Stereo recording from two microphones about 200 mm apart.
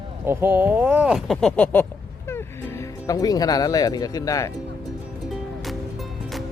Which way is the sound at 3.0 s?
20° left (ahead or behind).